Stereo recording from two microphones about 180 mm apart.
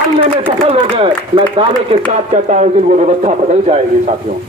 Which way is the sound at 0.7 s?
30° right (ahead or behind).